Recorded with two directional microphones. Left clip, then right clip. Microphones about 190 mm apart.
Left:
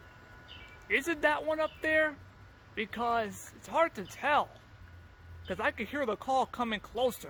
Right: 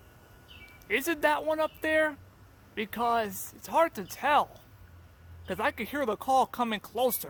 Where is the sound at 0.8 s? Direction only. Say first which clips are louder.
Right 2 dB; 25° right (ahead or behind).